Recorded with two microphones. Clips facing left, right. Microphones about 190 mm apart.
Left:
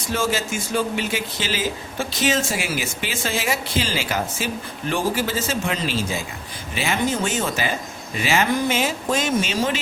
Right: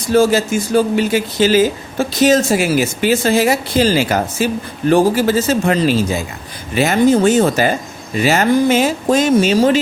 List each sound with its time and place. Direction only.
0.1 s speech: 40° right (ahead or behind)